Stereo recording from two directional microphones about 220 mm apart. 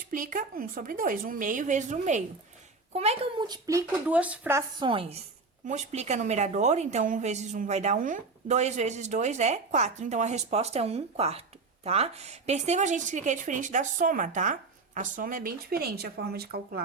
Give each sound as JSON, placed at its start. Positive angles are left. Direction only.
{"t": 0.1, "sound": "a woman's voice", "side_deg": -35}
{"t": 4.8, "sound": "a woman's voice", "side_deg": -25}